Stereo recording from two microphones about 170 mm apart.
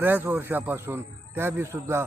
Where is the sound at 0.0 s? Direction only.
10° right (ahead or behind).